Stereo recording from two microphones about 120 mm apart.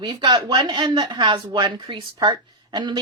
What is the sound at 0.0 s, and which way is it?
Speech, 35° right (ahead or behind).